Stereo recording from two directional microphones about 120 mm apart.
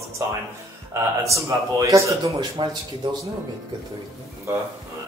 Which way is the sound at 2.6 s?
40° right (ahead or behind).